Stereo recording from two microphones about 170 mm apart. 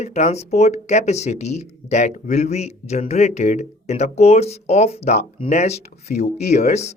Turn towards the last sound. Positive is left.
turn(degrees=40)  # may be behind; listen again after turning